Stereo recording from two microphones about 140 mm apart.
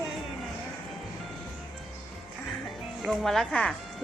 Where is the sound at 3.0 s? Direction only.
Centre (ahead or behind).